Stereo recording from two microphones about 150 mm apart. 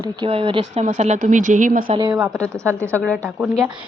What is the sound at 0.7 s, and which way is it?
Speech, 50° right (ahead or behind).